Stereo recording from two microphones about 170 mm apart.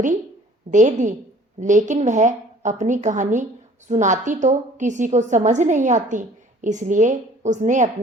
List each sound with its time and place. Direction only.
0.7 s a woman's voice: 45° right (ahead or behind)